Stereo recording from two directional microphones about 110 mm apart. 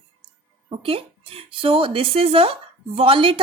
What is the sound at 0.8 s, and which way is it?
Speech, 60° right (ahead or behind).